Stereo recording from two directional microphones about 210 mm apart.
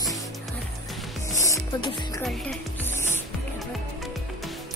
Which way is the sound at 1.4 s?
20° left (ahead or behind).